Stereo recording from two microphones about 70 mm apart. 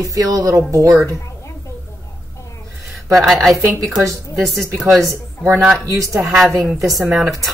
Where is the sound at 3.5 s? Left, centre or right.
Right.